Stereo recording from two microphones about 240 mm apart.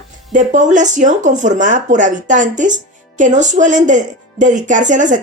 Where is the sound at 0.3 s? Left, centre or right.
Right.